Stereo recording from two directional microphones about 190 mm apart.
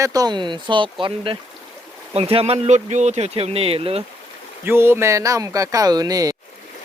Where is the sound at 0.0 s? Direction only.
20° right (ahead or behind).